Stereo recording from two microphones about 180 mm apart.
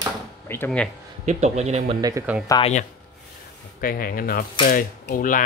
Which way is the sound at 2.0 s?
15° right (ahead or behind).